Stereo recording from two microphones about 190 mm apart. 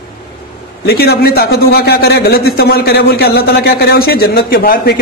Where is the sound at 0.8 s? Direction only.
55° left (ahead or behind).